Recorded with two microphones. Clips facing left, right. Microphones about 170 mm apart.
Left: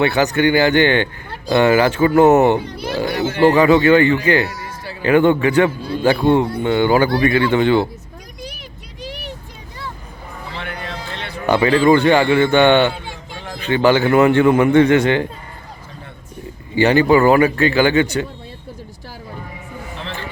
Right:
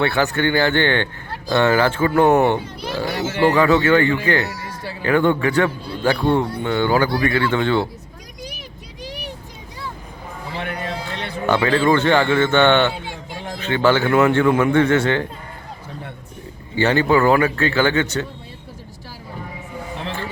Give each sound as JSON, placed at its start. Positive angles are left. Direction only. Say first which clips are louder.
{"t": 0.0, "sound": "a man's voice", "louder": "left 4 dB", "side_deg": 20}
{"t": 2.2, "sound": "speech", "louder": "left 3 dB", "side_deg": 5}
{"t": 3.5, "sound": "a man's voice", "louder": "left 3 dB", "side_deg": 20}
{"t": 10.6, "sound": "a sound", "louder": "right 3 dB", "side_deg": -40}
{"t": 11.4, "sound": "a man's voice", "louder": "left 4 dB", "side_deg": 15}
{"t": 16.7, "sound": "a man's voice", "louder": "left 4 dB", "side_deg": 15}